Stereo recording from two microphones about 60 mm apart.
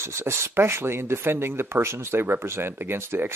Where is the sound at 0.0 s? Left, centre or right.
Right.